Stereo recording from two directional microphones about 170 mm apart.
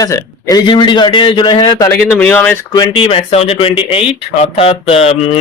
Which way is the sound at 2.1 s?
10° left (ahead or behind).